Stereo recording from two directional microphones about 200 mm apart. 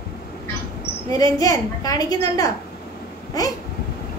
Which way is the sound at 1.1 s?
20° left (ahead or behind).